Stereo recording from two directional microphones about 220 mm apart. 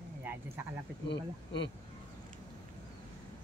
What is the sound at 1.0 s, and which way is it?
Speech, 55° left (ahead or behind).